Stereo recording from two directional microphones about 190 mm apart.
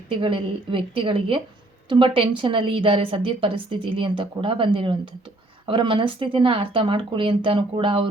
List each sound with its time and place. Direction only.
0.1 s a woman's voice: 25° right (ahead or behind)